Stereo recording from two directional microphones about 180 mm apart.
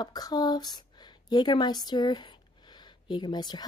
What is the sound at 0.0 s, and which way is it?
A woman's voice, 20° left (ahead or behind).